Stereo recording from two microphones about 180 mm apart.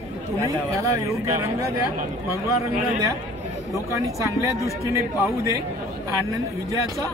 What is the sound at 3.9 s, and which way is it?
Speech, 15° right (ahead or behind).